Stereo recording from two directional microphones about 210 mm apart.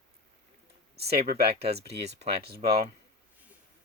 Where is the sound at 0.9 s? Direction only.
50° right (ahead or behind).